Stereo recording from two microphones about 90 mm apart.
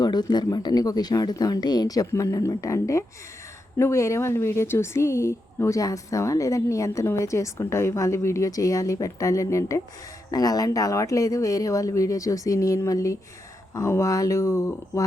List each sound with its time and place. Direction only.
0.0 s a woman's voice: 50° left (ahead or behind); by 15.0 s 35° left (ahead or behind)